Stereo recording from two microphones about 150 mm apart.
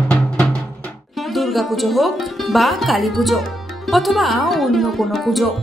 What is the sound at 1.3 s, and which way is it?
Speech, centre (ahead or behind).